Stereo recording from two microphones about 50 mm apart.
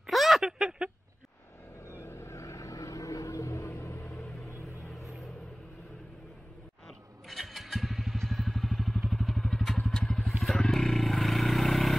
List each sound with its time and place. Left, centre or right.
0.1 s a sound: centre
2.0 s vehicle: left
7.2 s motorcycle: centre
9.1 s vehicle: centre
10.2 s vehicle: centre